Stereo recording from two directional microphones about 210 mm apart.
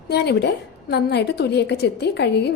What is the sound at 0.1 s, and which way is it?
A woman's voice, 50° left (ahead or behind).